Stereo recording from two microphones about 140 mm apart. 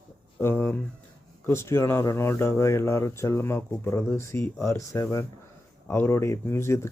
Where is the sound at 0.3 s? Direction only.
15° left (ahead or behind).